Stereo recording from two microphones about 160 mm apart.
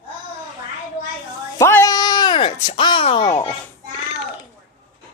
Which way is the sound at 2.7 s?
30° left (ahead or behind).